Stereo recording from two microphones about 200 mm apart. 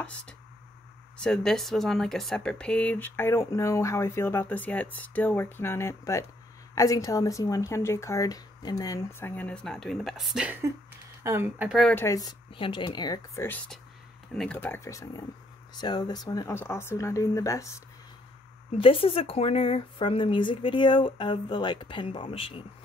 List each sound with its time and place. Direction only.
1.1 s speech: 5° left (ahead or behind)
11.8 s a woman's voice: 10° left (ahead or behind)
18.8 s a woman's voice: 30° left (ahead or behind)